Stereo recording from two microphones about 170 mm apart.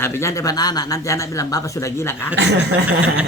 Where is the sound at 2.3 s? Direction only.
90° right.